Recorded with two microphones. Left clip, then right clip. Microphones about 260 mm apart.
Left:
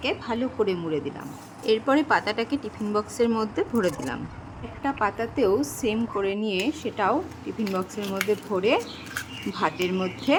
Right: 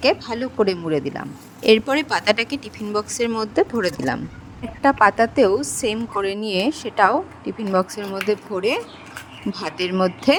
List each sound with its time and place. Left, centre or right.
0.0 s a woman's voice: right